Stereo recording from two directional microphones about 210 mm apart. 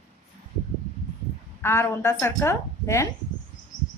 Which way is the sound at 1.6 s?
15° left (ahead or behind).